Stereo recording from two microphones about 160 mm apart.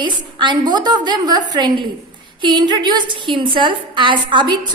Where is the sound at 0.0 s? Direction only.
30° right (ahead or behind).